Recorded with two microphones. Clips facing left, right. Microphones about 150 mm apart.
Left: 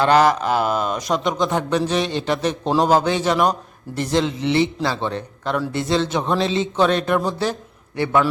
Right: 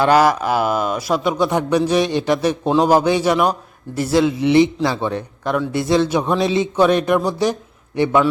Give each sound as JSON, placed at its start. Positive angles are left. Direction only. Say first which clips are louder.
{"t": 0.0, "sound": "a man's voice", "louder": "right 1 dB", "side_deg": -10}